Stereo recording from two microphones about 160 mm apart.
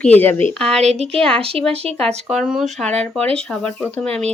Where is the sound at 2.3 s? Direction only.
Centre (ahead or behind).